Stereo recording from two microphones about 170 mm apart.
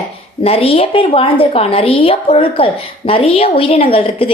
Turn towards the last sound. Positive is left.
turn(degrees=35)  # may be behind; listen again after turning